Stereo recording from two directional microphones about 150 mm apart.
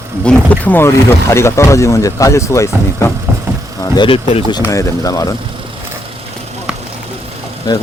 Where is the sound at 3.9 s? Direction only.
35° left (ahead or behind).